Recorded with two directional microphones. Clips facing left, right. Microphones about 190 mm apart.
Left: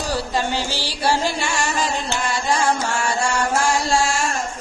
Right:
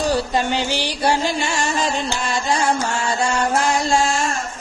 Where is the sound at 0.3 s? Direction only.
20° right (ahead or behind).